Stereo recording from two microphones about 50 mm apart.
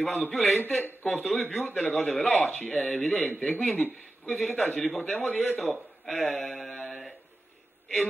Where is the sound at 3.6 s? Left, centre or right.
Left.